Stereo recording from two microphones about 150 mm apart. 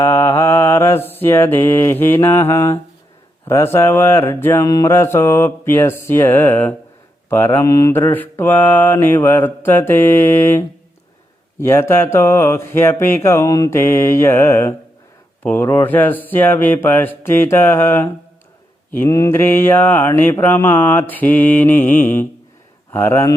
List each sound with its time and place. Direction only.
0.0 s mantra: 15° left (ahead or behind)
22.9 s speech: 15° left (ahead or behind)